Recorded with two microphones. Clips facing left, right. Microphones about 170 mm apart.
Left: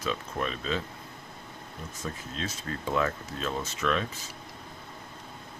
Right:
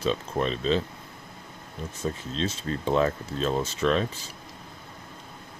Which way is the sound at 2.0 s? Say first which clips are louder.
Right 7 dB; 30° right (ahead or behind).